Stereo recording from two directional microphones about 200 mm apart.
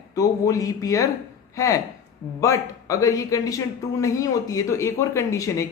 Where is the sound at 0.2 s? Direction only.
15° left (ahead or behind).